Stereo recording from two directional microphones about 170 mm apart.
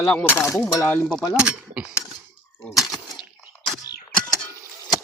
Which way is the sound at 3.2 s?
30° left (ahead or behind).